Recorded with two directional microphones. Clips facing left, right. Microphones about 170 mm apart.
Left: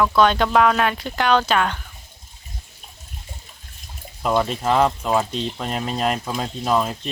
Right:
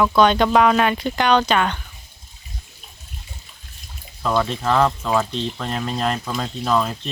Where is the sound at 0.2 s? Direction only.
Centre (ahead or behind).